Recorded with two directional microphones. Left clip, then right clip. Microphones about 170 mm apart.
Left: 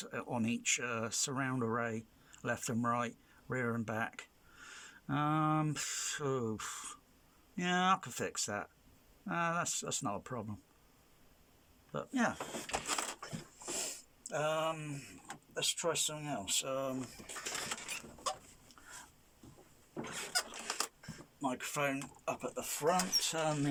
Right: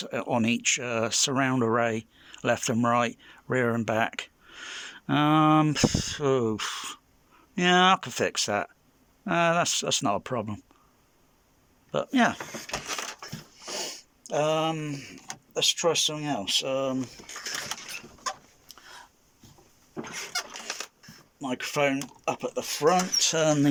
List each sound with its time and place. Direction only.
0.0 s speech: 25° right (ahead or behind)
11.9 s speech: 25° right (ahead or behind)
13.7 s sniff: 25° right (ahead or behind)
15.5 s speech: 30° right (ahead or behind)
18.7 s a sound: 25° right (ahead or behind)
20.3 s zipper: 5° left (ahead or behind)
21.4 s speech: 25° right (ahead or behind)
22.9 s speech: 40° right (ahead or behind)